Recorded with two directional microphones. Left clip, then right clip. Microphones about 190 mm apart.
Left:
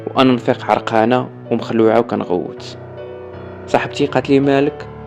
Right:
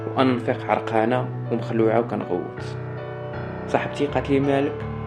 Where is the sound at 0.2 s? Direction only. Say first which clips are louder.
Left 8 dB; 50° left (ahead or behind).